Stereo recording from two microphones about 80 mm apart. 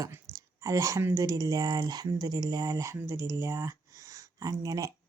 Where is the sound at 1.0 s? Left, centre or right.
Right.